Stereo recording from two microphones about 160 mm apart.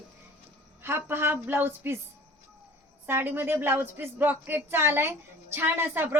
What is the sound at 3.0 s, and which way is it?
A woman's voice, 10° right (ahead or behind).